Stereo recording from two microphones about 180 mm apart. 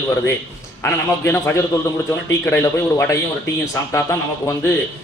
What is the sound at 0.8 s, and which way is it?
Speech, 15° left (ahead or behind).